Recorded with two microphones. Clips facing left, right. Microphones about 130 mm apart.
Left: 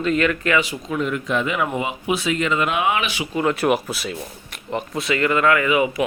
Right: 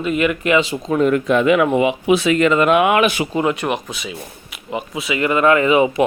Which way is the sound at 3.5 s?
5° left (ahead or behind).